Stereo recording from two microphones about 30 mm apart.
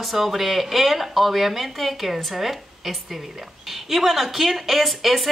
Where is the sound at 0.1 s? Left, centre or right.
Centre.